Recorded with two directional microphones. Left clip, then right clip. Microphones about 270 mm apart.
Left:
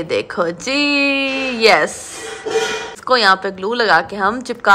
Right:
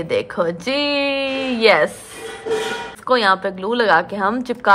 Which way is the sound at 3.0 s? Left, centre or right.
Centre.